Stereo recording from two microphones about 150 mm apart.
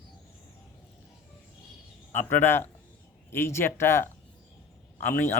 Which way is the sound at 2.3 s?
15° left (ahead or behind).